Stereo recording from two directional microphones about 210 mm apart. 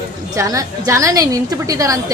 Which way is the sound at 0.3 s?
15° right (ahead or behind).